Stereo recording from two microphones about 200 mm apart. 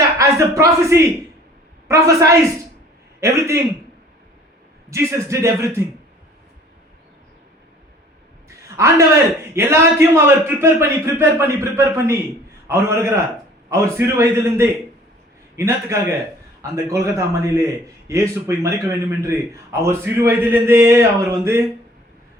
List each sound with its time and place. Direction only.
0.2 s a man's voice: 15° right (ahead or behind)
4.9 s a man's voice: 15° right (ahead or behind)
8.7 s a man's voice: 15° right (ahead or behind)